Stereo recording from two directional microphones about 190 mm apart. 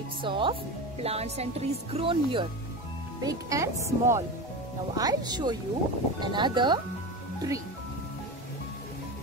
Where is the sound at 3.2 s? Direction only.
20° right (ahead or behind).